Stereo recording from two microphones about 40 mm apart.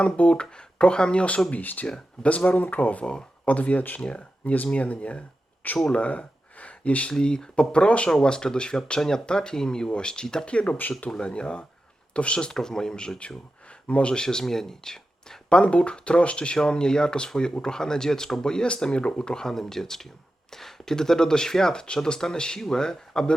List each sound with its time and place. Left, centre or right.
0.0 s speech: left
1.6 s speech: left
2.6 s speech: left
3.0 s speech: left
3.4 s speech: left
4.0 s speech: left
5.9 s a sound: left
7.1 s speech: left
12.5 s speech: centre
13.8 s speech: left; by 15.4 s centre
15.4 s speech: left